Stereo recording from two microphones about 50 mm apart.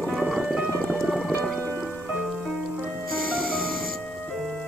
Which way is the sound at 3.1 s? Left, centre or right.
Centre.